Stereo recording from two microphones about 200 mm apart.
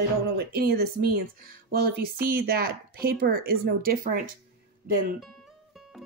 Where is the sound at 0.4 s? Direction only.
55° right (ahead or behind).